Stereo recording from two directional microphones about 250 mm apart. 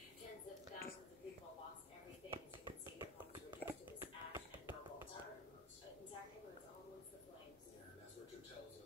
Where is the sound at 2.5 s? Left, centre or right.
Centre.